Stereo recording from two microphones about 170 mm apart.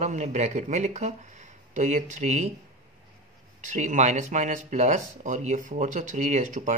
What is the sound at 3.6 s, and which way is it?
Speech, 45° right (ahead or behind).